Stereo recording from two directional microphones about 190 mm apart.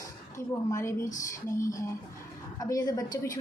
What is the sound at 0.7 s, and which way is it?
A woman's voice, 15° left (ahead or behind).